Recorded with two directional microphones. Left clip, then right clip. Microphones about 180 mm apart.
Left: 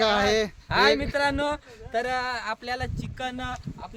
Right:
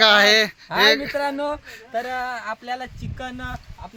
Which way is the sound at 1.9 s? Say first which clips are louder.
Right 1 dB; 20° left (ahead or behind).